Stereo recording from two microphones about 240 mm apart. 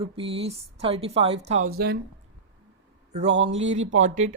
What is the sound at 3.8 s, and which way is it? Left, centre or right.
Speech, right.